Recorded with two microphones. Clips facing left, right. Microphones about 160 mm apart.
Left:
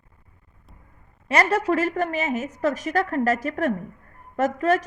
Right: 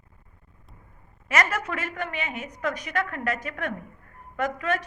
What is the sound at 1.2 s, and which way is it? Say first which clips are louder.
A woman's voice: left 6 dB; 35° left (ahead or behind).